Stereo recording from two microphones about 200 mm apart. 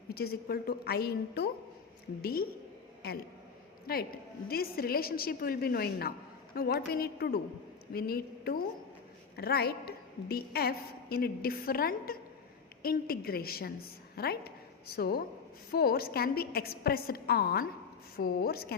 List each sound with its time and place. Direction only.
0.1 s a woman's voice: 50° left (ahead or behind)